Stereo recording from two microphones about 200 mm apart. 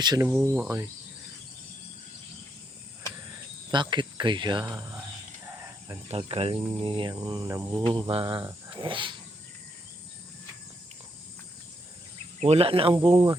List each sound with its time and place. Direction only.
0.0 s cricket: 20° right (ahead or behind)
0.3 s speech: 10° right (ahead or behind)
3.7 s cricket: 25° right (ahead or behind)
6.1 s cricket: 30° right (ahead or behind)
12.4 s cricket: 30° right (ahead or behind)